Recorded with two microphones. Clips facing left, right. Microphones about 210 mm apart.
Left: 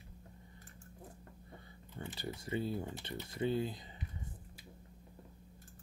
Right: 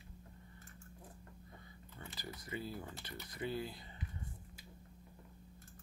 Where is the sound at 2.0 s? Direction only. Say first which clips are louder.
Left 7 dB; 30° left (ahead or behind).